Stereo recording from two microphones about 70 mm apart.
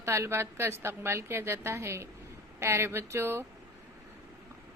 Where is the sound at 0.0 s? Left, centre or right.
Right.